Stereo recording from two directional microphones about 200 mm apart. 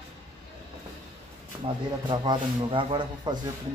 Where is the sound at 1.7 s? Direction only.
25° right (ahead or behind).